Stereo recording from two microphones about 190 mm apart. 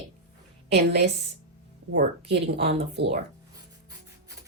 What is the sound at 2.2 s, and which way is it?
Speech, 60° right (ahead or behind).